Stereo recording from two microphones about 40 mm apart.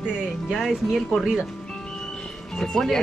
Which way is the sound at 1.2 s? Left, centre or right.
Centre.